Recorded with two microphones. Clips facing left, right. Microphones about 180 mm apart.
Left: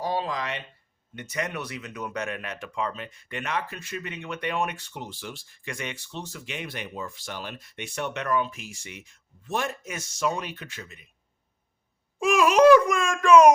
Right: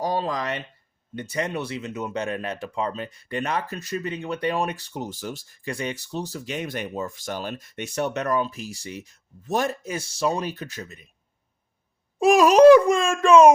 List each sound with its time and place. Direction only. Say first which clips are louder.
0.0 s speech: right 3 dB; 40° right (ahead or behind)
1.1 s speech: right 4 dB; 30° right (ahead or behind)
12.2 s speech: right 5 dB; 35° right (ahead or behind)
12.6 s speech: right 4 dB; 25° right (ahead or behind)